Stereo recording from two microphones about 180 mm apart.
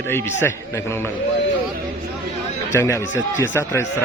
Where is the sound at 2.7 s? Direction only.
15° left (ahead or behind).